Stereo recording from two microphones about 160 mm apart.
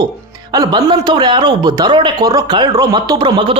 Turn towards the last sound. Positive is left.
turn(degrees=-30)  # may be behind; listen again after turning